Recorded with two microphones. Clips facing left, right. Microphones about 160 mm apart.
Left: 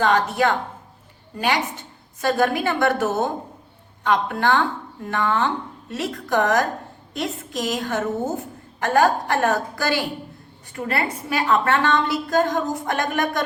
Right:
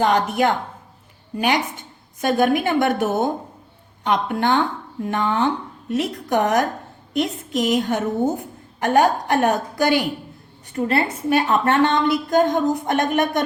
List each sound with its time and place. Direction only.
0.0 s a woman's voice: 15° right (ahead or behind)